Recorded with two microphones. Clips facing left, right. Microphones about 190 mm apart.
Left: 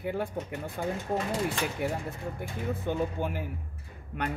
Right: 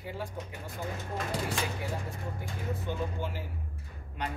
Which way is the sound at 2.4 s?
55° left (ahead or behind).